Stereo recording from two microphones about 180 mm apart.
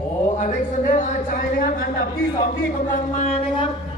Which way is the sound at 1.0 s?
50° left (ahead or behind).